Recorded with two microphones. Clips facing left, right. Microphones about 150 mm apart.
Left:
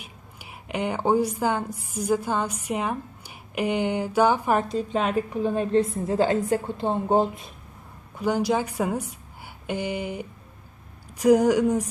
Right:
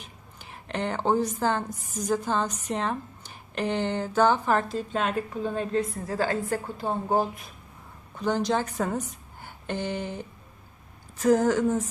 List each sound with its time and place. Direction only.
0.0 s a woman's voice: 10° left (ahead or behind)
8.1 s a woman's voice: 10° left (ahead or behind)